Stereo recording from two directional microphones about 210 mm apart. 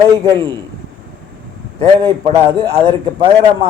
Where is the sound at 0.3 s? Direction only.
20° right (ahead or behind).